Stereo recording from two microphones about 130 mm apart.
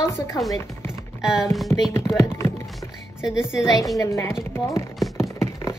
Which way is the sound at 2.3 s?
25° left (ahead or behind).